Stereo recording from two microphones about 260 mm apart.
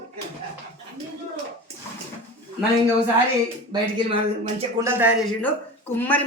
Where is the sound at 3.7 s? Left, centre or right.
Centre.